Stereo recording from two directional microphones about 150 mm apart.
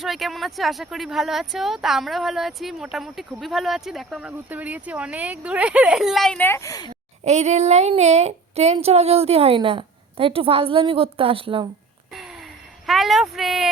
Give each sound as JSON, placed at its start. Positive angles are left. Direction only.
{"t": 0.0, "sound": "speech", "side_deg": 0}
{"t": 4.3, "sound": "speech", "side_deg": -10}
{"t": 7.3, "sound": "a woman's voice", "side_deg": -50}
{"t": 12.1, "sound": "gasp", "side_deg": 0}
{"t": 12.8, "sound": "speech", "side_deg": 0}